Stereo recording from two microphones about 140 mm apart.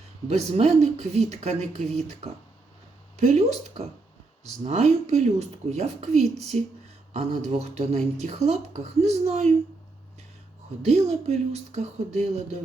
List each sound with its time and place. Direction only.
0.3 s speech: 50° right (ahead or behind)
10.8 s speech: 50° right (ahead or behind)